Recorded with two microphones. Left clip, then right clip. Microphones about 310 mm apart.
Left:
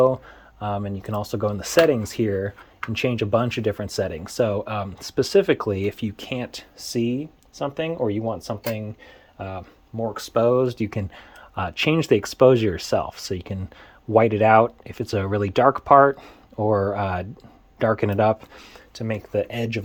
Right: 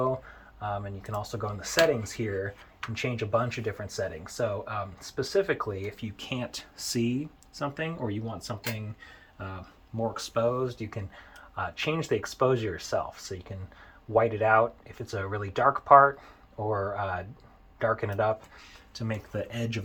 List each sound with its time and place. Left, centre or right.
0.6 s speech: left
6.1 s speech: centre
10.4 s speech: left
18.9 s speech: centre